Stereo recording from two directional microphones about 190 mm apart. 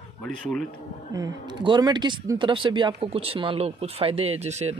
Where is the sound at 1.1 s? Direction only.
20° right (ahead or behind).